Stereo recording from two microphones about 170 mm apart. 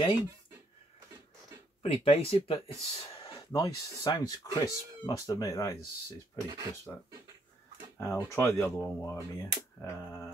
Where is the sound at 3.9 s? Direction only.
20° left (ahead or behind).